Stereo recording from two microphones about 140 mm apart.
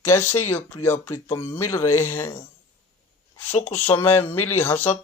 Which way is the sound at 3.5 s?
50° left (ahead or behind).